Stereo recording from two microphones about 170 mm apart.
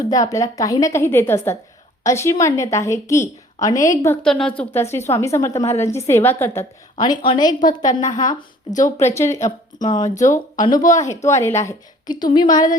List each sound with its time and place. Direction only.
0.1 s a woman's voice: 20° left (ahead or behind)
4.2 s a woman's voice: 5° left (ahead or behind)
6.9 s a woman's voice: 25° left (ahead or behind)